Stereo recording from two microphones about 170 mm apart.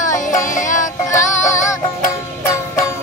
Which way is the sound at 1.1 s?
15° left (ahead or behind).